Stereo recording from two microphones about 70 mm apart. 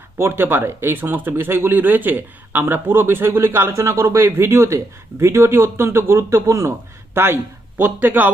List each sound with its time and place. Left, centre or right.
0.2 s a man's voice: right